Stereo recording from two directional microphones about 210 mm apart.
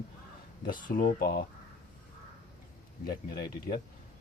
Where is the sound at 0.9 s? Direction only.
40° left (ahead or behind).